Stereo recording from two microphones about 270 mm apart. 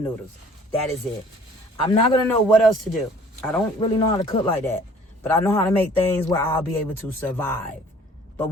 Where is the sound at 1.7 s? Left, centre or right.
Centre.